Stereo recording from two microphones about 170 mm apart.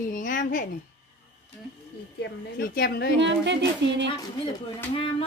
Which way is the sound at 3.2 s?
90° right.